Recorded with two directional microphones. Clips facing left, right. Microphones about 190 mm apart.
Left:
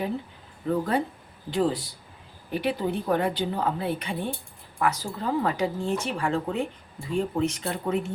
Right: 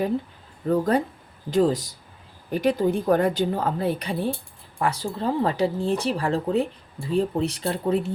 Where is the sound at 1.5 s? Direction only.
40° right (ahead or behind).